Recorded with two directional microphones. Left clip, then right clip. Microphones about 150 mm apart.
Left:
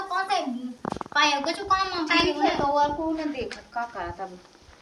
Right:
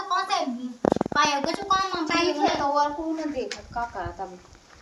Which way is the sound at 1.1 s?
5° left (ahead or behind).